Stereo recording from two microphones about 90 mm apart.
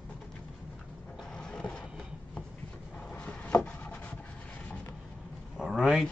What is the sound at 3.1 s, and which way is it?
Wood, 15° left (ahead or behind).